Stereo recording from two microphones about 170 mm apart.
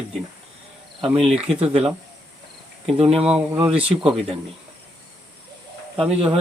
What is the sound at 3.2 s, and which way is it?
Speech, 5° right (ahead or behind).